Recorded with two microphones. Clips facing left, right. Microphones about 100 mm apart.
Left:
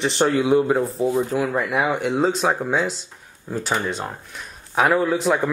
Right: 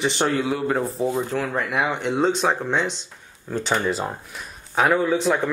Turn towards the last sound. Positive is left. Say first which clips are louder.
# left 1 dB
turn(degrees=5)  # may be behind; listen again after turning